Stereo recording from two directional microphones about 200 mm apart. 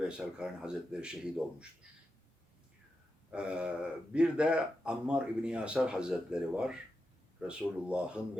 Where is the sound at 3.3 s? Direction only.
5° right (ahead or behind).